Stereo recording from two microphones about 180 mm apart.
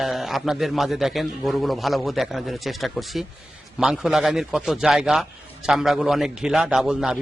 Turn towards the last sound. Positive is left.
turn(degrees=-5)  # may be behind; listen again after turning